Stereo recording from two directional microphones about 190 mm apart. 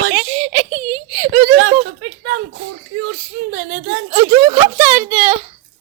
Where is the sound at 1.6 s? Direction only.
35° right (ahead or behind).